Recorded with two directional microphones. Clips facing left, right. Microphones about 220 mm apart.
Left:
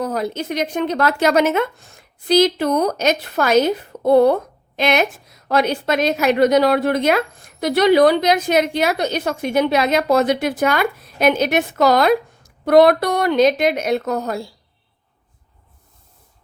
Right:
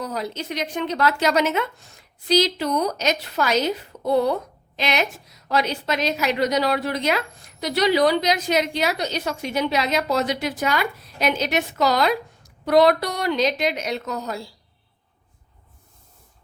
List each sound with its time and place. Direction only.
0.0 s a woman's voice: 50° left (ahead or behind)